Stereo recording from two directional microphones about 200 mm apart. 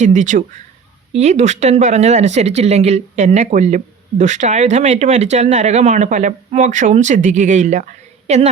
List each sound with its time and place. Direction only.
0.0 s speech: 40° right (ahead or behind)